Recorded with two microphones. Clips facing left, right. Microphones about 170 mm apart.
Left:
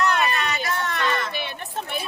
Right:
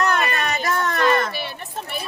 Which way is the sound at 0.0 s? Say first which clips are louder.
Right 1 dB; 45° right (ahead or behind).